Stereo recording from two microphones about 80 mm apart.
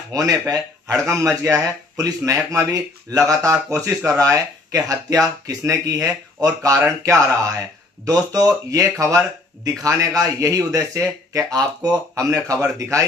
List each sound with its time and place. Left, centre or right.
0.1 s speech: right